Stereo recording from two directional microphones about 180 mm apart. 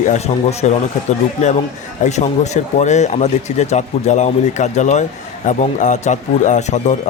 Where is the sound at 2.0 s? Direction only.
40° left (ahead or behind).